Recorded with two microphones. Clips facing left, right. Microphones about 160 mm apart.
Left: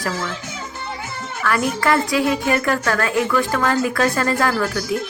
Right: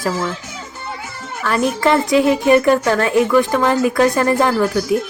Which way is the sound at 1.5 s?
25° right (ahead or behind).